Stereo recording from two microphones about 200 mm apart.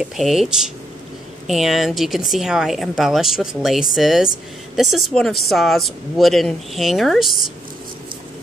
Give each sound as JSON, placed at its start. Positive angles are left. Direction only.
{"t": 0.0, "sound": "speech", "side_deg": 0}